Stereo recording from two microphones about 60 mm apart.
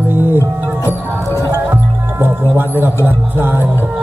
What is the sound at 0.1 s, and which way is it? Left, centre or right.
Music, right.